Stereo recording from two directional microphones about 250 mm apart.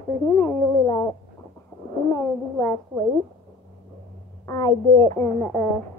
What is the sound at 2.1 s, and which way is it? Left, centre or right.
Speech, centre.